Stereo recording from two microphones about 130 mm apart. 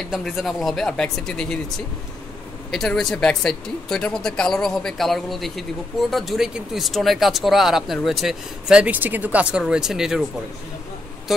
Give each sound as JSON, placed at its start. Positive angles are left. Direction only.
{"t": 0.1, "sound": "speech", "side_deg": 0}
{"t": 2.7, "sound": "speech", "side_deg": 0}